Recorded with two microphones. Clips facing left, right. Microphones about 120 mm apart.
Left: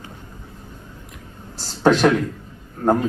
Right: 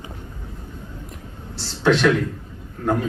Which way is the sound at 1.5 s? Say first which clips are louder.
Left 2 dB; 40° left (ahead or behind).